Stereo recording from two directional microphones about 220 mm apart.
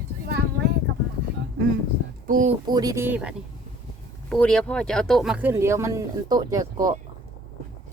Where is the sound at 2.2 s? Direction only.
40° right (ahead or behind).